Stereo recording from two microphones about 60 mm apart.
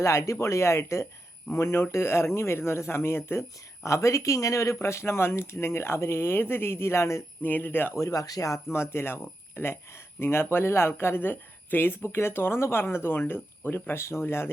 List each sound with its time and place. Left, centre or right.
0.0 s speech: left
3.8 s speech: left
7.4 s speech: left
7.9 s speech: left
8.7 s speech: left